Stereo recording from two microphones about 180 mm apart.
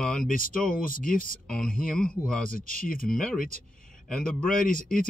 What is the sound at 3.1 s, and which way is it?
Speech, 5° left (ahead or behind).